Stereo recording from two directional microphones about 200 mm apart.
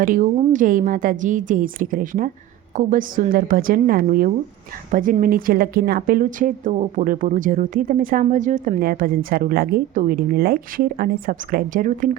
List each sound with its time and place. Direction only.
0.0 s a woman's voice: 40° right (ahead or behind)